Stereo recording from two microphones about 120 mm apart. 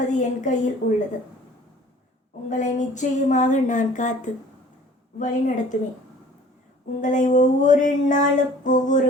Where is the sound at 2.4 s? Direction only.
90° left.